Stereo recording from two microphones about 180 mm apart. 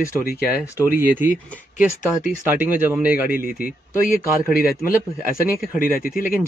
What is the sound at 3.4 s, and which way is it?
Speech, 50° left (ahead or behind).